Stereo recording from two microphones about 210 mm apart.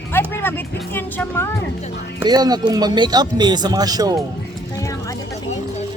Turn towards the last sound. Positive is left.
turn(degrees=-20)  # may be behind; listen again after turning